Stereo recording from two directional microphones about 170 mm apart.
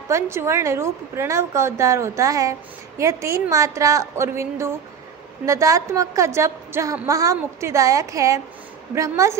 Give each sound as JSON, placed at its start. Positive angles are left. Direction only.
{"t": 0.1, "sound": "a woman's voice", "side_deg": -15}